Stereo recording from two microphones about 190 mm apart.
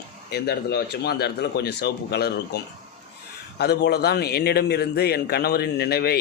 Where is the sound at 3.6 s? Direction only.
60° left (ahead or behind).